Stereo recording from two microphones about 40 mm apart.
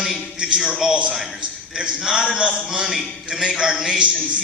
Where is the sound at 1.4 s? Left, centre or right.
Right.